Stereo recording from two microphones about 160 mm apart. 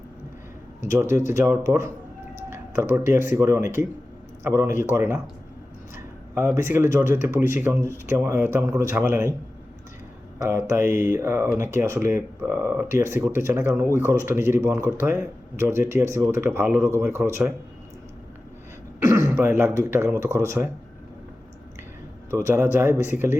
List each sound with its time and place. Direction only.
1.3 s speech: 15° right (ahead or behind)
3.1 s speech: 15° right (ahead or behind)
6.3 s speech: 15° right (ahead or behind)
10.5 s speech: 15° right (ahead or behind)
19.0 s speech: 20° right (ahead or behind)
22.3 s speech: 15° right (ahead or behind)